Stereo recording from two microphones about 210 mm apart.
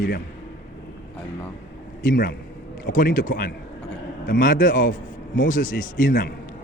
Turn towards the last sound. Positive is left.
turn(degrees=40)  # may be behind; listen again after turning